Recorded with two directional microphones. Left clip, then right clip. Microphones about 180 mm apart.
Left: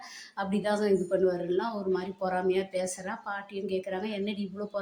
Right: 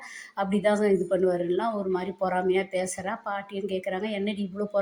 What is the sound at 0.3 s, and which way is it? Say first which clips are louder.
Speech: right 5 dB; 20° right (ahead or behind).